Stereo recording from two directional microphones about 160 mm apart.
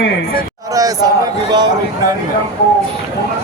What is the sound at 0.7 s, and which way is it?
Speech, 25° right (ahead or behind).